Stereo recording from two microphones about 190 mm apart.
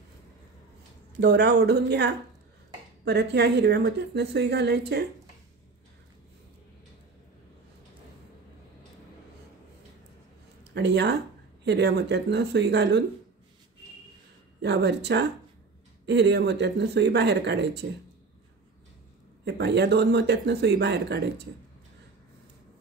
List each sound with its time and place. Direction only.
1.2 s speech: 65° right (ahead or behind)
3.1 s speech: 60° right (ahead or behind)
10.6 s a sound: 65° right (ahead or behind)
11.6 s speech: 65° right (ahead or behind)
14.6 s speech: 65° right (ahead or behind)
19.4 s speech: 60° right (ahead or behind)